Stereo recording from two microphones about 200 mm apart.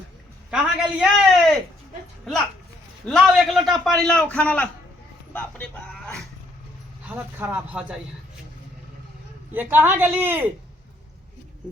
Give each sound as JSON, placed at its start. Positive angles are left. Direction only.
{"t": 0.5, "sound": "a man's voice", "side_deg": -5}
{"t": 3.1, "sound": "a man's voice", "side_deg": 0}
{"t": 7.1, "sound": "a man's voice", "side_deg": -10}
{"t": 9.5, "sound": "a man's voice", "side_deg": -10}